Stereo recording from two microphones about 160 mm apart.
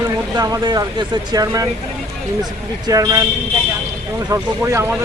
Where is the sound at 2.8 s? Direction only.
20° right (ahead or behind).